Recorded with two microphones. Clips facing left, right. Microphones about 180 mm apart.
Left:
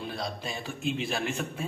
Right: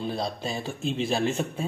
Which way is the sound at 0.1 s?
30° right (ahead or behind).